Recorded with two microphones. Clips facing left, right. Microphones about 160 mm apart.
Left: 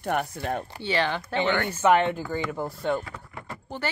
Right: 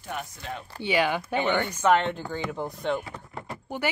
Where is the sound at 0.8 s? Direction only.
10° right (ahead or behind).